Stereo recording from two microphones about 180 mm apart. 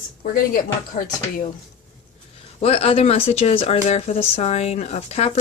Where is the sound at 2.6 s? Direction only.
30° left (ahead or behind).